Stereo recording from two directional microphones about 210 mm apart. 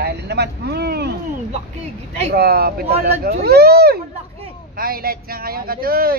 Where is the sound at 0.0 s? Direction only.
50° right (ahead or behind).